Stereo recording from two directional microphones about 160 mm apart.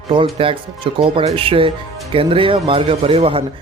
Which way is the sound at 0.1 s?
35° right (ahead or behind).